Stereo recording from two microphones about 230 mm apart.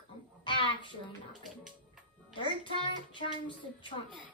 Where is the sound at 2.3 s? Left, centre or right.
Left.